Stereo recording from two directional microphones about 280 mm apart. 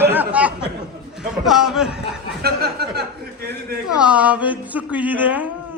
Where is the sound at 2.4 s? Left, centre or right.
Right.